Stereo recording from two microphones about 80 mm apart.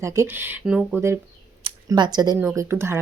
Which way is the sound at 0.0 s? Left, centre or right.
Right.